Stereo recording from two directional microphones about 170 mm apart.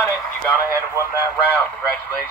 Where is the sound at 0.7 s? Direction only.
15° right (ahead or behind).